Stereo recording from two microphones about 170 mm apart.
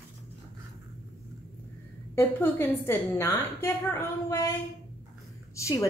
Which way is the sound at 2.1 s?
15° left (ahead or behind).